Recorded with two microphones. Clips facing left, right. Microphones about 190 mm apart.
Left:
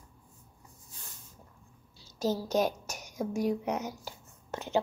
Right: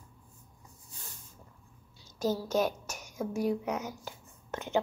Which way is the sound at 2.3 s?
35° left (ahead or behind).